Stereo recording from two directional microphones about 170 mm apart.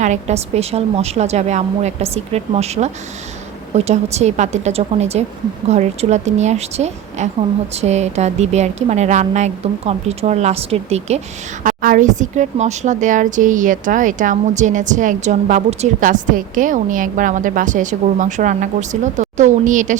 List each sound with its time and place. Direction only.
0.0 s a woman's voice: 40° right (ahead or behind)
11.6 s a woman's voice: 50° right (ahead or behind)